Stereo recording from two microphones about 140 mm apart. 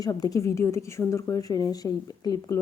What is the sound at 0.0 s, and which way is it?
A woman's voice, 25° left (ahead or behind).